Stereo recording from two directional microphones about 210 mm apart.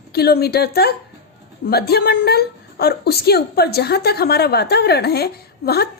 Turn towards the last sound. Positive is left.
turn(degrees=50)  # may be behind; listen again after turning